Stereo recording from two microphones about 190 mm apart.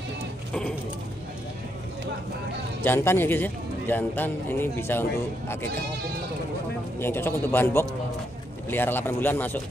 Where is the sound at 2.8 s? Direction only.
10° left (ahead or behind).